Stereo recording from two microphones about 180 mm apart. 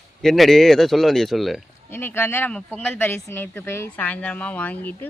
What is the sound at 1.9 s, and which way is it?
Speech, 10° left (ahead or behind).